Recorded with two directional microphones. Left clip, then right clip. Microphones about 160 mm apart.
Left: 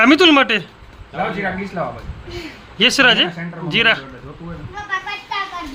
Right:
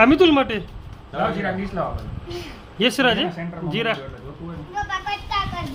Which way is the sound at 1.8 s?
60° left (ahead or behind).